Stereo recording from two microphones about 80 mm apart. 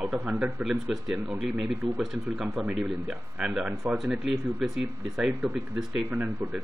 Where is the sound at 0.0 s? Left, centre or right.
Centre.